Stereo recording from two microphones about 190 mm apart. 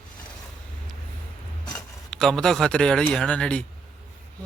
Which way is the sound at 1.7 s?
Centre (ahead or behind).